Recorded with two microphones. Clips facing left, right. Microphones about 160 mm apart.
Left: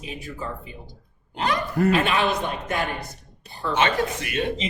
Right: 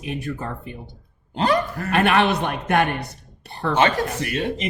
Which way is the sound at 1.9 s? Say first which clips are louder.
Right 8 dB; 60° right (ahead or behind).